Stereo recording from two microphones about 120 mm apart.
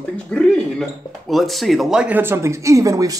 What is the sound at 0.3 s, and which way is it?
Speech, 10° left (ahead or behind).